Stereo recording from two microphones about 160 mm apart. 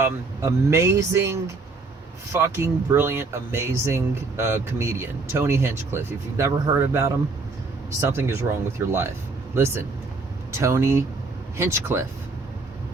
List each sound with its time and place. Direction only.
0.0 s speech: 15° right (ahead or behind)
10.5 s speech: 15° right (ahead or behind)